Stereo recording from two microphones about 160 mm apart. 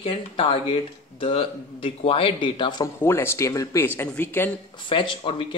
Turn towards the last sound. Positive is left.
turn(degrees=35)  # may be behind; listen again after turning